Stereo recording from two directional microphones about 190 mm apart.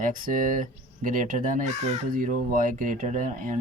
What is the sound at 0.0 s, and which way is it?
Speech, 45° right (ahead or behind).